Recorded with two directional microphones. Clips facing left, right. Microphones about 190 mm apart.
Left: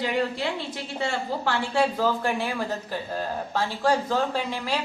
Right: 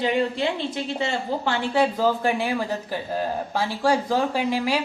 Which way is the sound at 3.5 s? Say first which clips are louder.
Right 1 dB; 10° right (ahead or behind).